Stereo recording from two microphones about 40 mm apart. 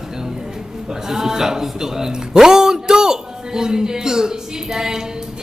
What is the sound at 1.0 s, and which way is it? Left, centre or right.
A man's voice, centre.